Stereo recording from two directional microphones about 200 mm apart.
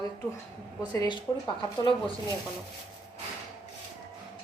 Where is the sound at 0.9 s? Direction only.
20° left (ahead or behind).